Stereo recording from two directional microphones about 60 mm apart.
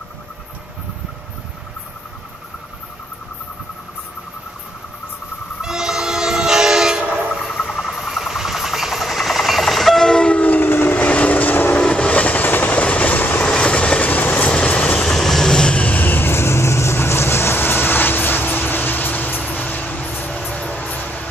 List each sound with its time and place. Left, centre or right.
5.6 s train: centre
7.4 s vehicle: centre; by 11.0 s left
11.0 s vehicle: left
11.8 s train: centre
13.5 s train: centre
15.1 s vehicle: centre; by 21.3 s left